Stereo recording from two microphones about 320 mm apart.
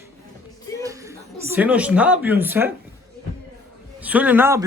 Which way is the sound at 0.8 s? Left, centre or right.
Centre.